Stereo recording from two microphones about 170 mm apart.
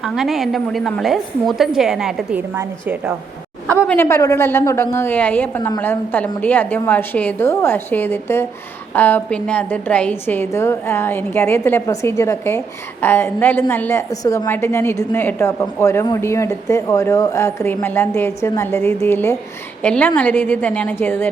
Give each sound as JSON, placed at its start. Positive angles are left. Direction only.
{"t": 0.0, "sound": "a woman's voice", "side_deg": 0}
{"t": 3.8, "sound": "a woman's voice", "side_deg": 15}